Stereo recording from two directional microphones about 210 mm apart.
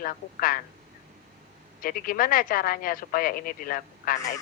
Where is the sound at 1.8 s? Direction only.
40° left (ahead or behind).